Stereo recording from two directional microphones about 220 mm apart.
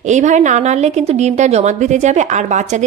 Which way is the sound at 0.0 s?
30° right (ahead or behind).